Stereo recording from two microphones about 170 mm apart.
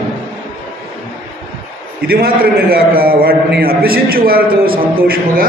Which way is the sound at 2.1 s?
60° right (ahead or behind).